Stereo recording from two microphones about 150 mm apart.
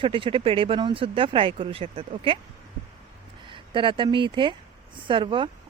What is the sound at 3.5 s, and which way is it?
Speech, 35° right (ahead or behind).